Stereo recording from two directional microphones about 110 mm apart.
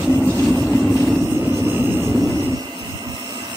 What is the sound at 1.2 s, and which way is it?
Vehicle, 20° right (ahead or behind).